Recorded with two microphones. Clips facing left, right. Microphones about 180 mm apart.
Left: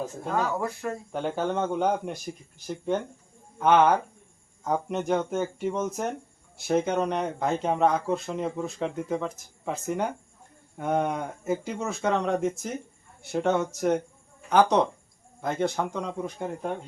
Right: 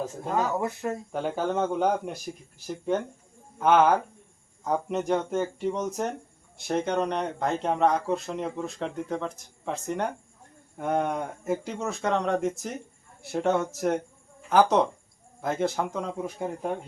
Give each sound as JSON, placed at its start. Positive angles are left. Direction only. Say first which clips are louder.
{"t": 0.3, "sound": "speech", "louder": "right 1 dB", "side_deg": -20}
{"t": 1.1, "sound": "speech", "louder": "left 1 dB", "side_deg": 0}